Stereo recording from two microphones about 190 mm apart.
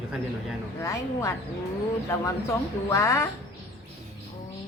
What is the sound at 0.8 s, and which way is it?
Speech, 15° left (ahead or behind).